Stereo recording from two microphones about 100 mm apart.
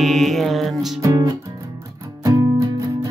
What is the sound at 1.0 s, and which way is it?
Music, 35° right (ahead or behind).